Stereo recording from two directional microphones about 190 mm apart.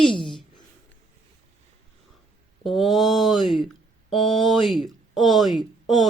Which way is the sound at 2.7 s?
Centre (ahead or behind).